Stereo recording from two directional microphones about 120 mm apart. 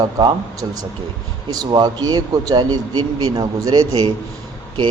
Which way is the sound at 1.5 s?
35° right (ahead or behind).